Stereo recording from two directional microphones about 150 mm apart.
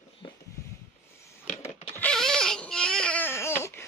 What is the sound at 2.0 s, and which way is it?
Baby cry, 5° left (ahead or behind).